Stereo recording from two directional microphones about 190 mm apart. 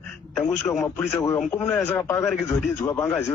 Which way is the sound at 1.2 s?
10° left (ahead or behind).